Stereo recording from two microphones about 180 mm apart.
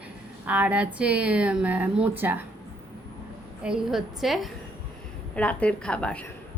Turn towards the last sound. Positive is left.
turn(degrees=5)  # may be behind; listen again after turning